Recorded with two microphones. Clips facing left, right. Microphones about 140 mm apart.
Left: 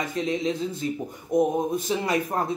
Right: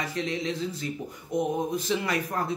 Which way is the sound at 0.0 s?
20° left (ahead or behind).